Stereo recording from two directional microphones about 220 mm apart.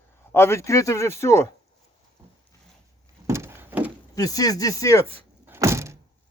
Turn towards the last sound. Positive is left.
turn(degrees=-15)  # may be behind; listen again after turning